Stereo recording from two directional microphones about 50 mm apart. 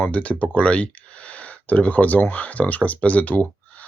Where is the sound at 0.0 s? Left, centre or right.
Left.